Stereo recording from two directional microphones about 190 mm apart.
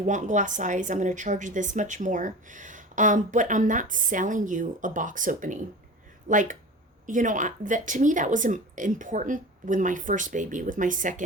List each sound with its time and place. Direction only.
0.0 s a woman's voice: 40° right (ahead or behind)